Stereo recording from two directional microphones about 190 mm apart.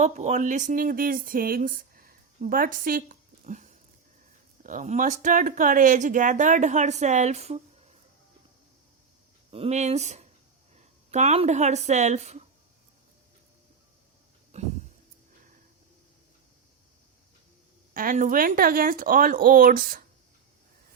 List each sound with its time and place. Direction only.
0.0 s speech: 40° right (ahead or behind)
9.5 s speech: 35° right (ahead or behind)
14.5 s a sound: 35° right (ahead or behind)
17.9 s speech: 45° right (ahead or behind)